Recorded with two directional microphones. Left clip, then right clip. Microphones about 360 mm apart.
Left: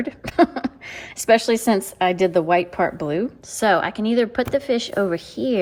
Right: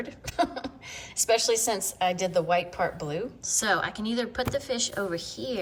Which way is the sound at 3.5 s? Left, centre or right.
Centre.